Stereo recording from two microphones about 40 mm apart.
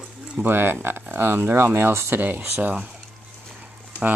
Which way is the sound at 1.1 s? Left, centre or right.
Right.